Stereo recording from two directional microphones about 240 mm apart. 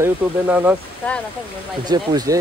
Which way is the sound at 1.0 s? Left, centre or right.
Centre.